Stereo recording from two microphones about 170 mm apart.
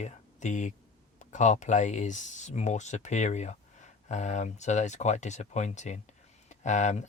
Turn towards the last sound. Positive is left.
turn(degrees=45)  # may be behind; listen again after turning